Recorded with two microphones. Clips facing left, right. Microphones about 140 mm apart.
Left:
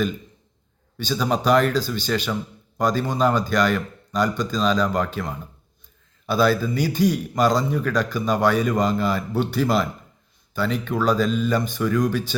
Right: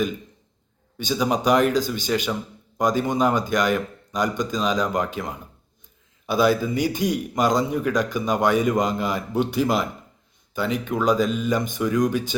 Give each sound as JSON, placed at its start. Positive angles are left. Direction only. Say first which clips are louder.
{"t": 0.9, "sound": "a man's voice", "louder": "even", "side_deg": -15}